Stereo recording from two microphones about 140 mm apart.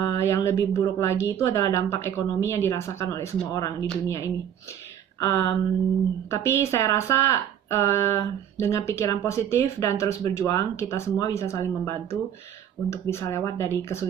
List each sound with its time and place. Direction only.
0.0 s a woman's voice: 25° left (ahead or behind)